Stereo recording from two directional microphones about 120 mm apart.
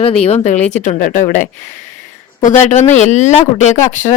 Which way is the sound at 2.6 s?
80° left.